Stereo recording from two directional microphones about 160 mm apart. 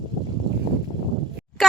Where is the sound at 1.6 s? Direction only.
Centre (ahead or behind).